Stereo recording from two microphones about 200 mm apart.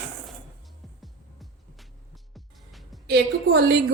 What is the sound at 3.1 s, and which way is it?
Speech, 55° right (ahead or behind).